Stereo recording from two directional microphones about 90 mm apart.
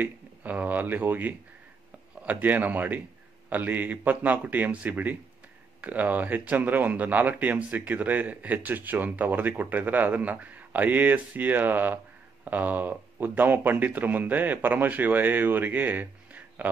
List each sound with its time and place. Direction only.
0.0 s speech: 20° right (ahead or behind)